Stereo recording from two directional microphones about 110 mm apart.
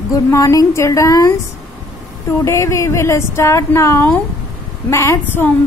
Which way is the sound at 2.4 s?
25° left (ahead or behind).